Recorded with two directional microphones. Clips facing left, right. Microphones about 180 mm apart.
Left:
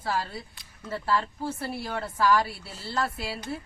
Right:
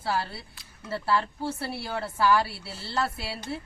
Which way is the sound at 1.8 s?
5° right (ahead or behind).